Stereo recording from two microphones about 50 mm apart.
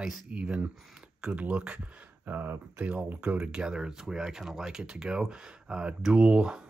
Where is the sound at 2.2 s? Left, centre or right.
Right.